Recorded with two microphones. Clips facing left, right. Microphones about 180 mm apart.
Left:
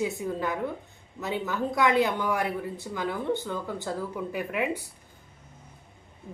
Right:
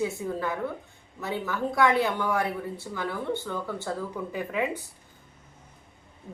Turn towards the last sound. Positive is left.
turn(degrees=15)  # may be behind; listen again after turning